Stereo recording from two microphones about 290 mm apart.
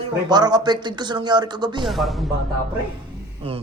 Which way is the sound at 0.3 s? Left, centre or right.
Centre.